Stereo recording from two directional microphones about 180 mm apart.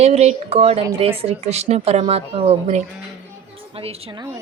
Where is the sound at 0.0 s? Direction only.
35° right (ahead or behind).